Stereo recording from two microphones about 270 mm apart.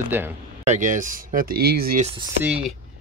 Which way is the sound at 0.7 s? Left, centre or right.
Right.